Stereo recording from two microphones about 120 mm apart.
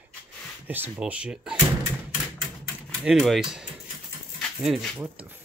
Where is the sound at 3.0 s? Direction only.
Centre (ahead or behind).